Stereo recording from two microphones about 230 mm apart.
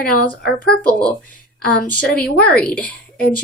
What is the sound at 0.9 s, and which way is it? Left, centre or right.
Speech, centre.